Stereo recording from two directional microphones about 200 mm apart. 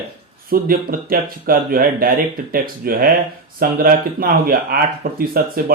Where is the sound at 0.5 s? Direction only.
45° right (ahead or behind).